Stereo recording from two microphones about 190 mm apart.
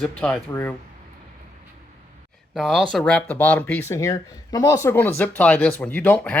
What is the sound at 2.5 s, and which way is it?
Speech, centre (ahead or behind).